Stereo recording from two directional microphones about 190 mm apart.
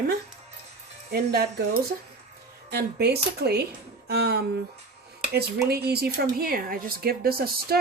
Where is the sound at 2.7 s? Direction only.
60° right (ahead or behind).